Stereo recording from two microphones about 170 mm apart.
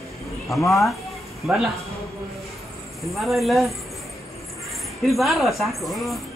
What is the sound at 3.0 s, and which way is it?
Speech, centre (ahead or behind).